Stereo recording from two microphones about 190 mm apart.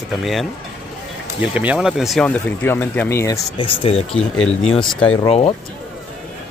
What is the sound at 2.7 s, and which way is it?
Speech, 10° left (ahead or behind).